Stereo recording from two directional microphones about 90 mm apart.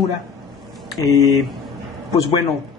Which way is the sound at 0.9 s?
40° left (ahead or behind).